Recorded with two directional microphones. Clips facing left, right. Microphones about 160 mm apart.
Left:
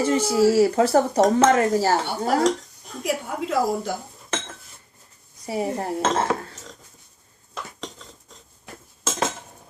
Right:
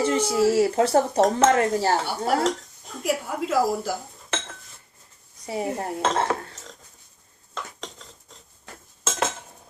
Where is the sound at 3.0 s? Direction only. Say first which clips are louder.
Even; centre (ahead or behind).